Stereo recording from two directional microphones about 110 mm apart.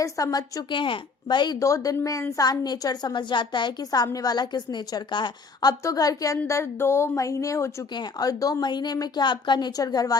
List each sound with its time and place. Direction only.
0.0 s a woman's voice: 35° left (ahead or behind)
0.8 s speech: 45° left (ahead or behind)
1.5 s a woman's voice: 30° left (ahead or behind)